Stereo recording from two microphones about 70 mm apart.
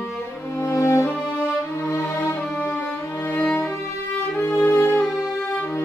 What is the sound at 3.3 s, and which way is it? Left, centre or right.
Music, left.